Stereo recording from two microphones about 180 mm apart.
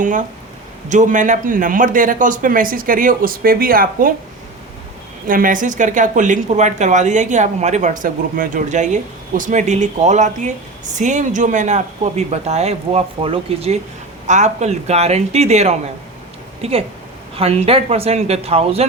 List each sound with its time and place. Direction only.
0.0 s speech: 45° right (ahead or behind)
5.3 s speech: 50° right (ahead or behind)